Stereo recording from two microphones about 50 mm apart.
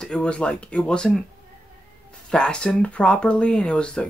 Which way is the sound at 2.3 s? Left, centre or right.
Centre.